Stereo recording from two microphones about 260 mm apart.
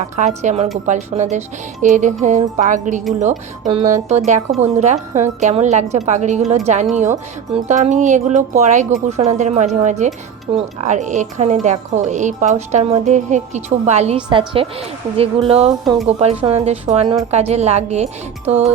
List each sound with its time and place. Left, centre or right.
0.2 s speech: right